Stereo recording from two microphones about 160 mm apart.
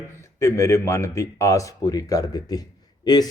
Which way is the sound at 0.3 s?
15° left (ahead or behind).